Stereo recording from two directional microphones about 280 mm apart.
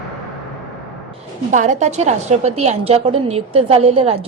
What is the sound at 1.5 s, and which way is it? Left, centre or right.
A woman's voice, right.